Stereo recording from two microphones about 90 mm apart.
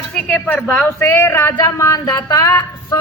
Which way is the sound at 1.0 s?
30° left (ahead or behind).